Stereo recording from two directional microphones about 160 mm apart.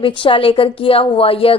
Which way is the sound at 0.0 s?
30° left (ahead or behind).